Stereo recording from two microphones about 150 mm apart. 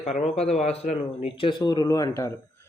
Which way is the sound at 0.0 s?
45° left (ahead or behind).